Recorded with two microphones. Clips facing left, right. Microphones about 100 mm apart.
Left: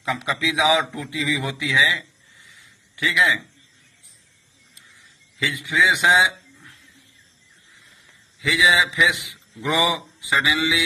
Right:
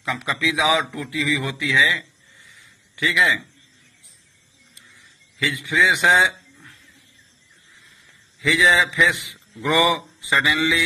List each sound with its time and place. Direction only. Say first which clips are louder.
0.4 s a man's voice: even; 20° left (ahead or behind)
3.0 s a man's voice: even; centre (ahead or behind)
5.4 s a man's voice: right 1 dB; 10° left (ahead or behind)
8.4 s a man's voice: right 1 dB; 5° left (ahead or behind)